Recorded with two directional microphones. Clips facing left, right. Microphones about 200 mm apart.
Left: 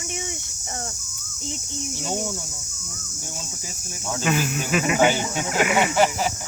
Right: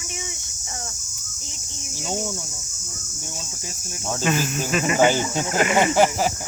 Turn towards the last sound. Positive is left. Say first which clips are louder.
# right 2 dB
turn(degrees=5)  # may be behind; listen again after turning